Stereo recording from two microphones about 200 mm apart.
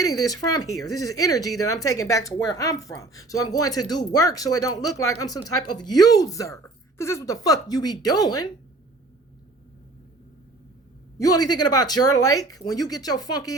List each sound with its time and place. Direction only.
0.3 s speech: 20° left (ahead or behind)
11.2 s speech: 20° left (ahead or behind)